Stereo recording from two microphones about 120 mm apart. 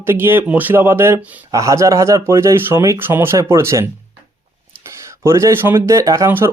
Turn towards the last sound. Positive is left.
turn(degrees=-25)  # may be behind; listen again after turning